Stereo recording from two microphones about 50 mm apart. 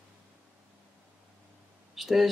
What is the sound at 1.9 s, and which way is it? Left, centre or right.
Speech, centre.